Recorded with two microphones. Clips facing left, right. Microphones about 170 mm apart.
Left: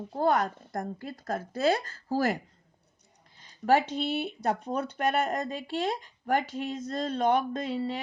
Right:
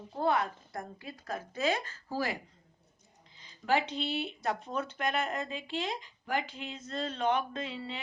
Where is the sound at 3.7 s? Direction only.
50° left (ahead or behind).